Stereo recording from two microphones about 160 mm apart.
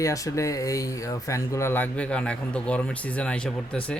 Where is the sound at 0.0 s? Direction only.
20° left (ahead or behind).